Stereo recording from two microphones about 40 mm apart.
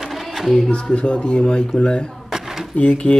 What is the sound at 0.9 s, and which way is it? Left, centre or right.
Speech, left.